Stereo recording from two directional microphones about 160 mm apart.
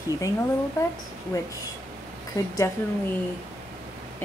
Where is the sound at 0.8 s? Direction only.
20° left (ahead or behind).